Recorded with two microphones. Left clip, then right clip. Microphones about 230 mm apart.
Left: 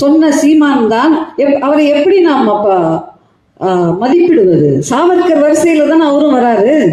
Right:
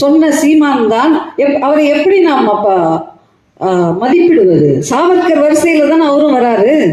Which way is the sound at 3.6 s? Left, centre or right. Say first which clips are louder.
Even; left.